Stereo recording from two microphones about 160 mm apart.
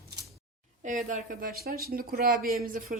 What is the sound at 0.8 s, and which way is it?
A woman's voice, 50° right (ahead or behind).